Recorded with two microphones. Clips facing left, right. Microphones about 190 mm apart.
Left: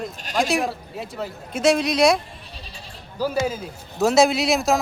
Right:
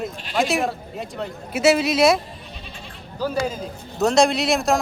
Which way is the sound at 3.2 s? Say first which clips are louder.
Left 1 dB; 10° left (ahead or behind).